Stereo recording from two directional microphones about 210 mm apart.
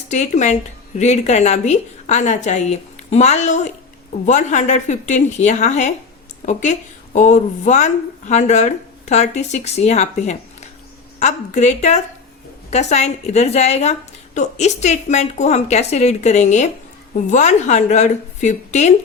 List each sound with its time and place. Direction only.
0.1 s a woman's voice: 35° left (ahead or behind)